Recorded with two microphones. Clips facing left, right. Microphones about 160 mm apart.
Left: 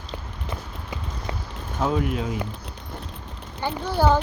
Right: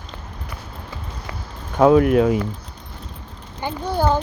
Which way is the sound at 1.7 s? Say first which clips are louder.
Right 11 dB; 65° right (ahead or behind).